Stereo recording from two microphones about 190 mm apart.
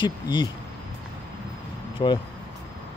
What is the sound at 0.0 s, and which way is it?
Speech, 25° left (ahead or behind).